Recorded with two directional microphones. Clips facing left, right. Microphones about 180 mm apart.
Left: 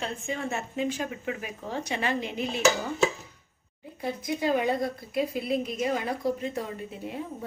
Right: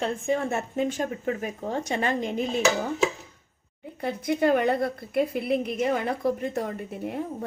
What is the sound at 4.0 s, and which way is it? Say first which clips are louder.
A woman's voice: right 5 dB; 60° right (ahead or behind).